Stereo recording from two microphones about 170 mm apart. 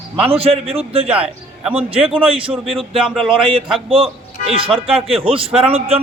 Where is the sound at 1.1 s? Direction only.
10° right (ahead or behind).